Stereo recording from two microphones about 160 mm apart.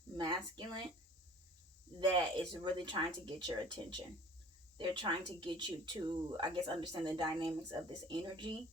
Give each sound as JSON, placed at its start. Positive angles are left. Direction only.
{"t": 0.2, "sound": "speech", "side_deg": -30}
{"t": 2.0, "sound": "speech", "side_deg": -30}